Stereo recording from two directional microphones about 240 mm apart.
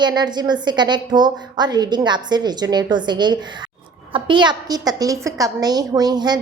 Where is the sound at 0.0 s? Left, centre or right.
Centre.